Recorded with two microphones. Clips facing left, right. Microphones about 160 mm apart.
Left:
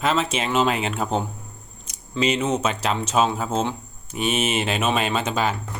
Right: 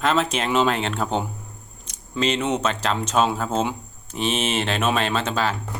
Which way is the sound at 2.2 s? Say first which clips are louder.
Left 1 dB; 5° left (ahead or behind).